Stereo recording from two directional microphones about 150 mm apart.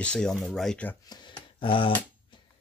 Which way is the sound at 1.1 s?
35° left (ahead or behind).